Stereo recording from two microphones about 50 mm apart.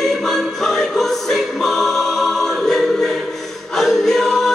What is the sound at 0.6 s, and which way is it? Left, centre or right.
Music, centre.